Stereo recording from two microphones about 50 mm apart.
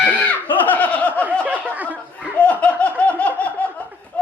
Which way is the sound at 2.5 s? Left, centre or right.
Left.